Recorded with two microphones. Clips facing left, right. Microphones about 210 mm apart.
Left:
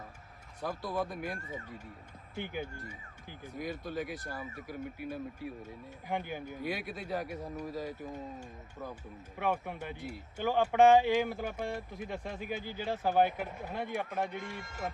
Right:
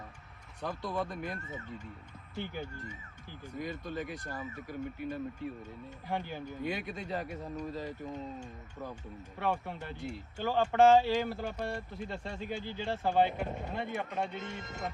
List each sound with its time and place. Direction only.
0.6 s speech: 5° left (ahead or behind)
2.3 s speech: 15° left (ahead or behind)
9.4 s speech: 15° left (ahead or behind)
14.3 s speech: 20° right (ahead or behind)